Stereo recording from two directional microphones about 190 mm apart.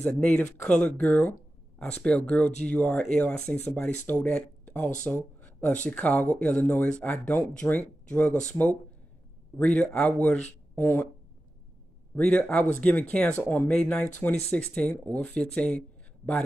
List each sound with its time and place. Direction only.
0.0 s speech: 10° left (ahead or behind)
5.0 s a sound: 5° left (ahead or behind)
5.9 s speech: 5° left (ahead or behind)
9.8 s speech: 5° left (ahead or behind)
12.2 s speech: 5° left (ahead or behind)